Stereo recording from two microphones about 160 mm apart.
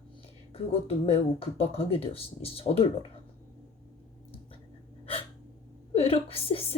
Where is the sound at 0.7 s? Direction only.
40° left (ahead or behind).